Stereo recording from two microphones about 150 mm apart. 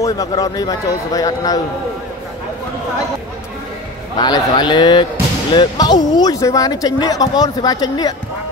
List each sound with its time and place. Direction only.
0.0 s speech: 20° left (ahead or behind)
4.2 s a man's voice: 30° left (ahead or behind)